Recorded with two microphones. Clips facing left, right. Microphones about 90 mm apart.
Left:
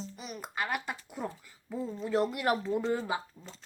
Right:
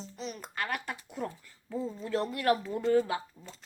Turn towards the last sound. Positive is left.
turn(degrees=20)  # may be behind; listen again after turning